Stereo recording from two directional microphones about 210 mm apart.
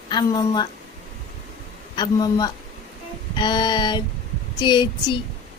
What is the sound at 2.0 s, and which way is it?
Child singing, 20° left (ahead or behind).